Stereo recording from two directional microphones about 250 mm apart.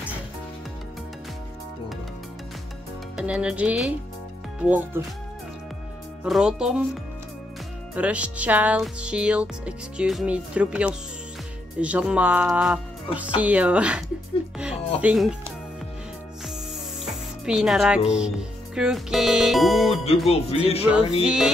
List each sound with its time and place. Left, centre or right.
3.2 s music: centre
4.6 s speech: centre
6.2 s music: centre
7.9 s music: centre
17.0 s speech: centre
18.8 s music: centre
20.2 s music: left
21.2 s music: centre